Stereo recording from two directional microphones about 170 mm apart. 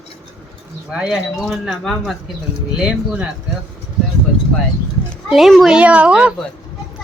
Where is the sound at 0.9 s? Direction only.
5° right (ahead or behind).